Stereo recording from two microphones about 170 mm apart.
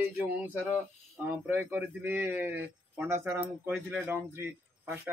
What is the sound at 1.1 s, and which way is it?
Speech, 10° right (ahead or behind).